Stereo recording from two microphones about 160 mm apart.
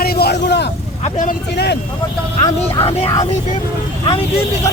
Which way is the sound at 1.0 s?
50° left (ahead or behind).